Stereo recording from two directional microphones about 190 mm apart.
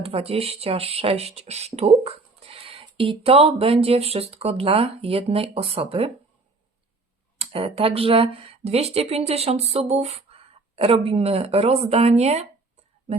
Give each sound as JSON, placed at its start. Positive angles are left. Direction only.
{"t": 0.0, "sound": "speech", "side_deg": -30}
{"t": 7.3, "sound": "speech", "side_deg": -30}